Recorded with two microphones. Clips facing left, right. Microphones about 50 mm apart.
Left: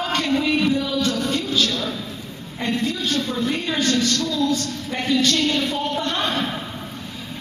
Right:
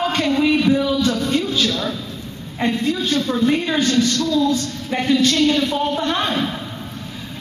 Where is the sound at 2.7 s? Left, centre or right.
Centre.